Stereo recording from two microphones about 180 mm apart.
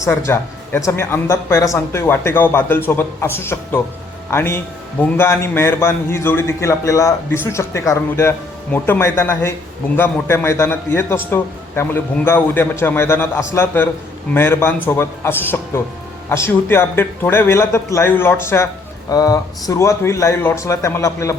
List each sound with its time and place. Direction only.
0.3 s speech: 15° left (ahead or behind)